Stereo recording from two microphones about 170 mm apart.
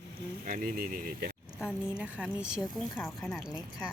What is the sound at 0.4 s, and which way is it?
Speech, 55° right (ahead or behind).